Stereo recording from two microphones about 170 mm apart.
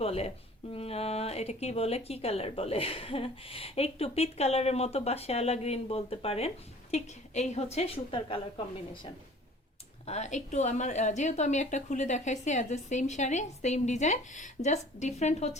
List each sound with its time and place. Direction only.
0.0 s speech: 35° left (ahead or behind)
10.1 s a woman's voice: 40° left (ahead or behind)